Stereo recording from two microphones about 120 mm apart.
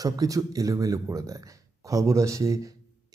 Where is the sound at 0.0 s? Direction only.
30° right (ahead or behind).